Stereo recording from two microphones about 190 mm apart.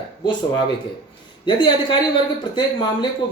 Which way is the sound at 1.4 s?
25° left (ahead or behind).